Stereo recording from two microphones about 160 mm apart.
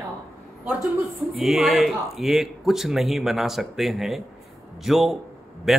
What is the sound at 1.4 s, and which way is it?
Speech, centre (ahead or behind).